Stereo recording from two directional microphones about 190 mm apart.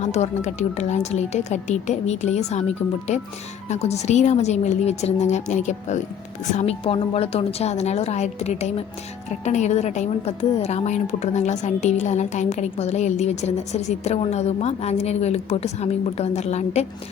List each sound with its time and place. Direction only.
0.0 s a woman's voice: 35° left (ahead or behind)
3.7 s a woman's voice: 35° left (ahead or behind)